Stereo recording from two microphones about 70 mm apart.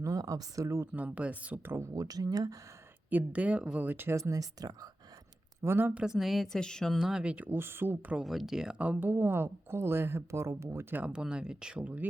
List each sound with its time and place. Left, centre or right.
0.0 s speech: right
0.9 s speech: centre
1.6 s speech: right
1.9 s speech: right
3.1 s speech: right
3.8 s speech: right
4.2 s speech: right
5.6 s speech: right
6.1 s speech: centre
7.0 s speech: centre
7.3 s speech: right
8.2 s speech: centre
8.8 s speech: right
11.0 s speech: centre